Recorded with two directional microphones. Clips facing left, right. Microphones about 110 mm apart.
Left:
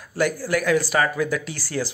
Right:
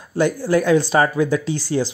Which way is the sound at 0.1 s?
25° right (ahead or behind).